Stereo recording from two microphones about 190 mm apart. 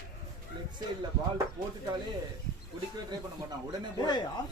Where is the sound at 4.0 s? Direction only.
20° left (ahead or behind).